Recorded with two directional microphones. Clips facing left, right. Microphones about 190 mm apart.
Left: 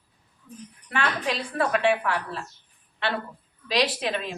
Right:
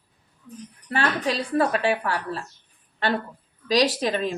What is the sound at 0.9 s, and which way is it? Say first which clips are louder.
A woman's voice: right 3 dB; 35° right (ahead or behind).